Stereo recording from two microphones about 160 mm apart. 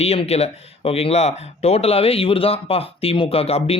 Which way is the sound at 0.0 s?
40° left (ahead or behind).